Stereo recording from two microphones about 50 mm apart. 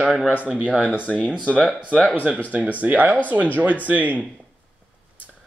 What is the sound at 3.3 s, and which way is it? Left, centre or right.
Speech, right.